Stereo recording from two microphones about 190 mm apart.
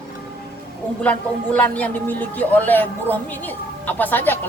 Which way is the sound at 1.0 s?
5° left (ahead or behind).